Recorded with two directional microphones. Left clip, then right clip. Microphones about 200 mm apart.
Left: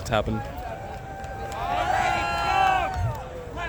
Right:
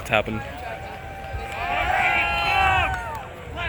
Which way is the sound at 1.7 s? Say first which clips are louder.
Right 3 dB; 20° left (ahead or behind).